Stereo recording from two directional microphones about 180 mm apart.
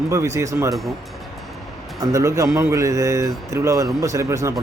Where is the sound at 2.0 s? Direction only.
15° right (ahead or behind).